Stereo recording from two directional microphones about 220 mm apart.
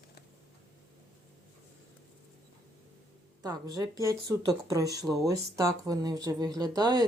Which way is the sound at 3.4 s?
15° right (ahead or behind).